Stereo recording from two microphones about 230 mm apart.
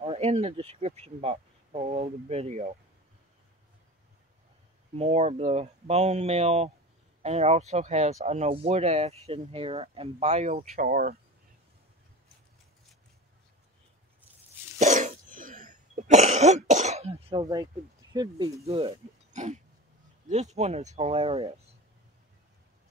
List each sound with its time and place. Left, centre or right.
0.0 s speech: right
4.9 s speech: right
10.8 s speech: right
14.8 s throat clearing: right
18.1 s speech: centre